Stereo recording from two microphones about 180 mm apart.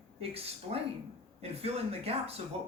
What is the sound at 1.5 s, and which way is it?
Speech, 35° right (ahead or behind).